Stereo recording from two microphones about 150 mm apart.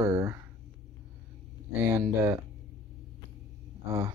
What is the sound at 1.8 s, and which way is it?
Speech, 15° right (ahead or behind).